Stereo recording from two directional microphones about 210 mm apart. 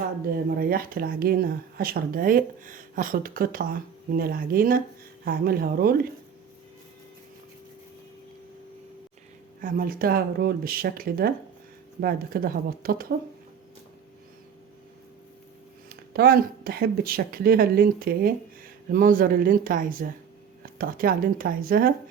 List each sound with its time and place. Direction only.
0.6 s speech: 45° right (ahead or behind)
9.6 s speech: 40° right (ahead or behind)
15.9 s speech: 45° right (ahead or behind)